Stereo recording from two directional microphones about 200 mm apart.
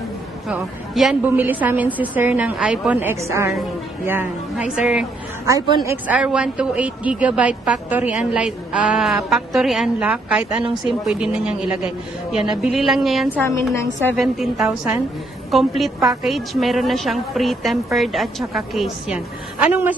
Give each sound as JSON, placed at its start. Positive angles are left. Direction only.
{"t": 0.5, "sound": "a woman's voice", "side_deg": -5}